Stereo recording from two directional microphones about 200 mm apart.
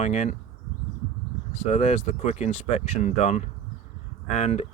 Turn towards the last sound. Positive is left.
turn(degrees=35)  # may be behind; listen again after turning